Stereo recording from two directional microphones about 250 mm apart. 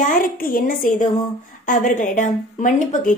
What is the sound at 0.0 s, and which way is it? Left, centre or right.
A woman's voice, left.